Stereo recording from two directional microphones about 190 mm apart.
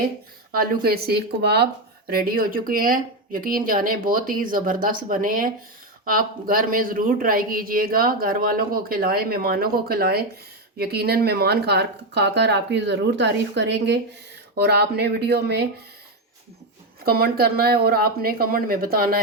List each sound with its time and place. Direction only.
0.5 s speech: 50° right (ahead or behind)
17.1 s speech: 50° right (ahead or behind)